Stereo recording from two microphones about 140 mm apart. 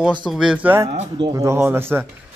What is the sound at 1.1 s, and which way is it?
Speech, 25° right (ahead or behind).